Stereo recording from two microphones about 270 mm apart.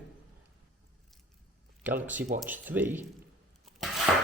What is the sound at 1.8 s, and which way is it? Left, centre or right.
Speech, centre.